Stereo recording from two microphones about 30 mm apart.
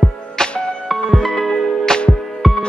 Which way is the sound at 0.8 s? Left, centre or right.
Centre.